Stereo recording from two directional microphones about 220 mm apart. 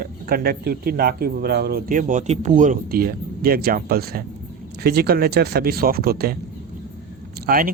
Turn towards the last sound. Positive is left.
turn(degrees=-40)  # may be behind; listen again after turning